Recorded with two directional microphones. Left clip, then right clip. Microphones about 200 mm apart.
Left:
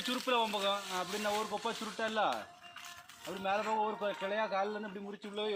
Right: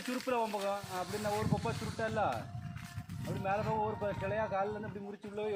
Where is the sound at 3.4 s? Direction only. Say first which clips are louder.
Left 1 dB; 30° right (ahead or behind).